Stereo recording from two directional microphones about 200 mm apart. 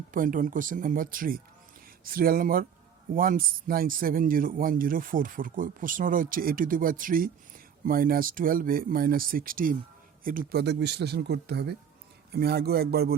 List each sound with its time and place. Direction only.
0.1 s a man's voice: 40° right (ahead or behind)